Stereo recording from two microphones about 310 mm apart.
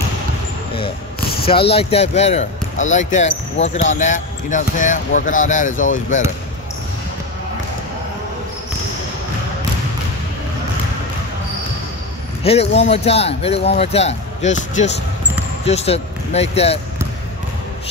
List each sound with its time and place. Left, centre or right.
1.4 s speech: centre
12.4 s speech: centre
15.6 s speech: centre